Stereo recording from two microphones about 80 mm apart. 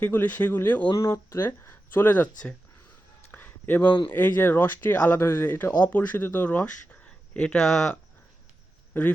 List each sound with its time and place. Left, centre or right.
0.0 s speech: left
0.9 s speech: left; by 2.6 s centre
3.3 s a sound: left
4.1 s speech: left
7.3 s speech: centre
8.9 s speech: left